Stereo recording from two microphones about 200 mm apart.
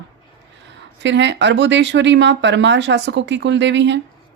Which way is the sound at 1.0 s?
65° right (ahead or behind).